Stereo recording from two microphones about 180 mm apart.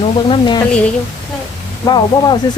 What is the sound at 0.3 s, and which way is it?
Speech, 25° left (ahead or behind).